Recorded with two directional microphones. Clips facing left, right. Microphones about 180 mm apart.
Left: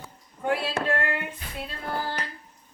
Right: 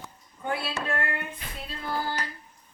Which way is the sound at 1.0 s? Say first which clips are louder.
Left 3 dB; 90° left.